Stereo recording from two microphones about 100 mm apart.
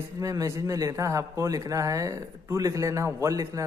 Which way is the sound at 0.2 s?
35° right (ahead or behind).